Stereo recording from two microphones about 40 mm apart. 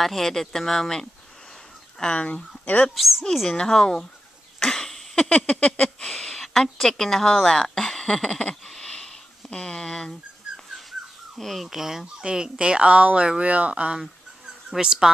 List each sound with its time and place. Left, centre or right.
0.0 s a woman's voice: centre
2.0 s speech: centre
2.2 s a sound: left
2.9 s speech: centre
3.4 s a woman's voice: centre
4.6 s cough: centre
5.3 s a sound: left
6.0 s a sound: centre
6.6 s a woman's voice: centre
8.6 s a sound: centre
10.9 s dog: centre
12.3 s a woman's voice: right
14.8 s speech: centre